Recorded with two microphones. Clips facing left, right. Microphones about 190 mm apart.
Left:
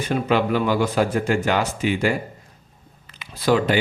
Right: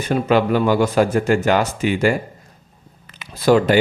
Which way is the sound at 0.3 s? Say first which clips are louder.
Right 4 dB; 45° right (ahead or behind).